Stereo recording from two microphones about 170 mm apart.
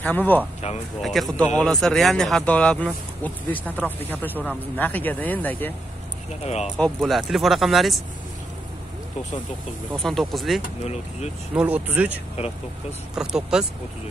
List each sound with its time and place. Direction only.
0.0 s speech: 10° left (ahead or behind)
6.4 s speech: 40° left (ahead or behind)
6.8 s speech: centre (ahead or behind)
10.0 s speech: centre (ahead or behind)
10.6 s speech: 40° left (ahead or behind)
11.5 s speech: 10° right (ahead or behind)
13.1 s speech: 5° right (ahead or behind)